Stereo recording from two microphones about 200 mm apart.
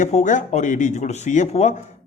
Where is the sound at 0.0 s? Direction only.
35° left (ahead or behind).